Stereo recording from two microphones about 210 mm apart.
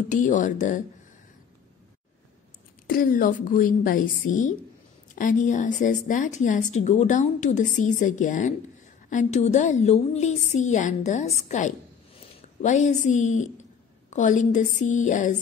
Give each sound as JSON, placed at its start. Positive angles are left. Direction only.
{"t": 0.1, "sound": "a woman's voice", "side_deg": 35}
{"t": 2.9, "sound": "a woman's voice", "side_deg": 40}